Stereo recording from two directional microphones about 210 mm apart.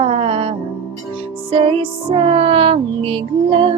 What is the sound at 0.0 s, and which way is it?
Music, 25° right (ahead or behind).